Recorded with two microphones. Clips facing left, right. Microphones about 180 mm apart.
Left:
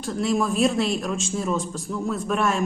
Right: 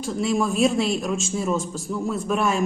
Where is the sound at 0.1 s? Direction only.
Centre (ahead or behind).